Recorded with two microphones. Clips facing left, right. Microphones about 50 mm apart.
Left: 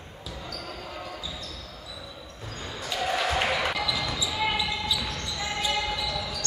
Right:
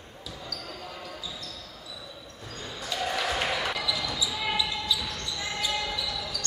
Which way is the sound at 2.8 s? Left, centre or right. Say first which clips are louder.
Left 2 dB; centre.